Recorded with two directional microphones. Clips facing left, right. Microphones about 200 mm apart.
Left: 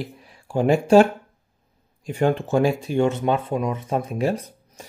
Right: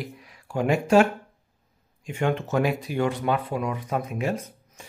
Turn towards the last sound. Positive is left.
turn(degrees=35)  # may be behind; listen again after turning